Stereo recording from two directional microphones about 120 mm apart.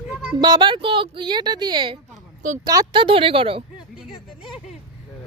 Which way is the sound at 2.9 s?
50° right (ahead or behind).